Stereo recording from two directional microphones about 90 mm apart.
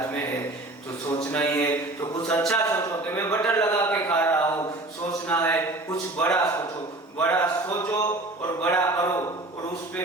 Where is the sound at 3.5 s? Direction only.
35° left (ahead or behind).